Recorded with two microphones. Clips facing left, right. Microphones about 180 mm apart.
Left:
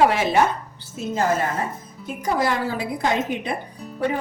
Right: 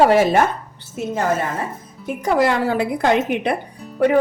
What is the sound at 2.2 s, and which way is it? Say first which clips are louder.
A woman's voice: right 5 dB; 70° right (ahead or behind).